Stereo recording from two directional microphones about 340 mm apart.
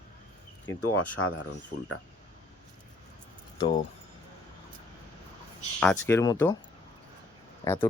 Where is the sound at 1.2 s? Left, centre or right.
Left.